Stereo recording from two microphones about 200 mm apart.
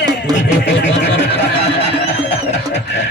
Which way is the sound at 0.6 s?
60° left (ahead or behind).